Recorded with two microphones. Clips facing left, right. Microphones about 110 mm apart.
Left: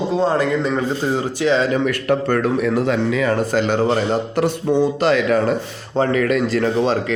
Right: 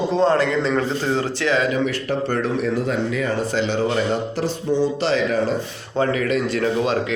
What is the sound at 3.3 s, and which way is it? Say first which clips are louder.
Speech: left 3 dB; 45° left (ahead or behind).